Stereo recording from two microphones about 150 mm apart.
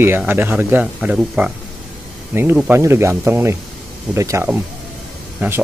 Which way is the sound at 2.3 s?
15° right (ahead or behind).